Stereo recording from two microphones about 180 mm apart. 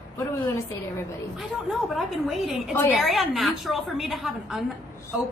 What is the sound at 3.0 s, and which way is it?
A woman's voice, centre (ahead or behind).